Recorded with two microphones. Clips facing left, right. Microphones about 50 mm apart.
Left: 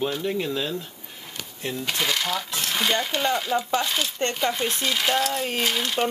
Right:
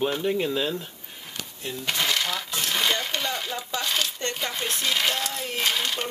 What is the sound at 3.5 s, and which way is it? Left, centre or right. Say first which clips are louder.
Speech: left 9 dB; left.